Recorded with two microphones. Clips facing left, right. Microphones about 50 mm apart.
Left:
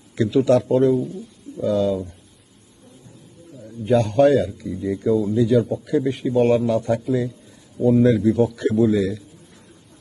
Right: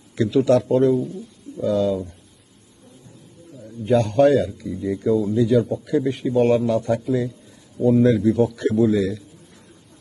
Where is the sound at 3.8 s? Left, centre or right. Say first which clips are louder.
Even; centre.